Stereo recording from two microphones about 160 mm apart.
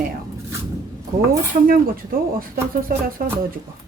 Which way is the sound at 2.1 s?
65° right (ahead or behind).